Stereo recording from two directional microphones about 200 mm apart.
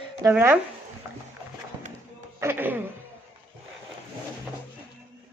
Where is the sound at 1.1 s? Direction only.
15° right (ahead or behind).